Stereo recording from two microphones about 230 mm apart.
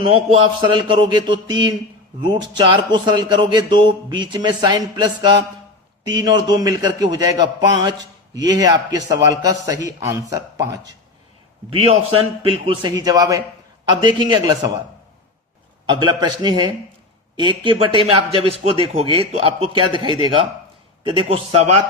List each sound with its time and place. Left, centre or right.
0.0 s a man's voice: right
11.7 s a man's voice: right
15.9 s speech: centre